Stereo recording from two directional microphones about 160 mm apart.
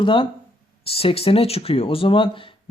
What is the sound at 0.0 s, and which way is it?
Speech, 30° left (ahead or behind).